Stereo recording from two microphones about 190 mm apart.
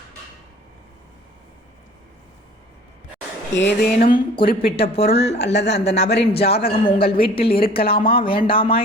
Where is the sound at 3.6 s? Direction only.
60° left (ahead or behind).